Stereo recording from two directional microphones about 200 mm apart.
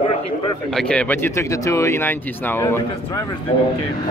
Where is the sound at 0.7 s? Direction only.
5° left (ahead or behind).